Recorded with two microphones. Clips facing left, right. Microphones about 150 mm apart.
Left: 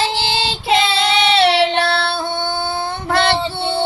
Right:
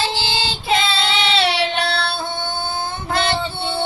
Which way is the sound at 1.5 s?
65° left (ahead or behind).